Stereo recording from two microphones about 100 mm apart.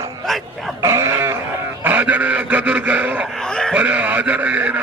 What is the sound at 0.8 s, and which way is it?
Goat, 30° right (ahead or behind).